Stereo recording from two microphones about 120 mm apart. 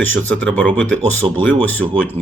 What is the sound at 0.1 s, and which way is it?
Speech, 10° left (ahead or behind).